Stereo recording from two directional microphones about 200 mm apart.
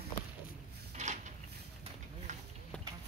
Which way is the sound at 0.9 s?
35° right (ahead or behind).